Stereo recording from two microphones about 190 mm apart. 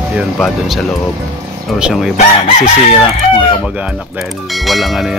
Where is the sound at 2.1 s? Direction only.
35° left (ahead or behind).